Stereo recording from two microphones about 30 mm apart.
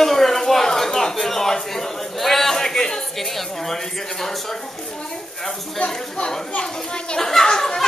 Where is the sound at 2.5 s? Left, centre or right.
Left.